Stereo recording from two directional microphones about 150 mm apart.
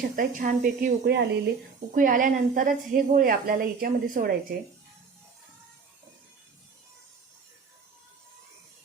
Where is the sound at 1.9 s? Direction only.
65° right (ahead or behind).